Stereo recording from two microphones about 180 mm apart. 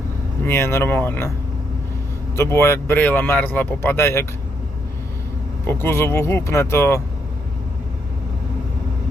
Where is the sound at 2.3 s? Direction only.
15° left (ahead or behind).